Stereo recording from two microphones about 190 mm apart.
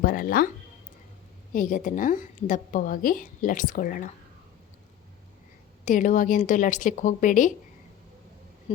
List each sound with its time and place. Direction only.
0.0 s a woman's voice: 50° left (ahead or behind)
1.5 s a woman's voice: 45° left (ahead or behind)
5.8 s a woman's voice: 40° left (ahead or behind)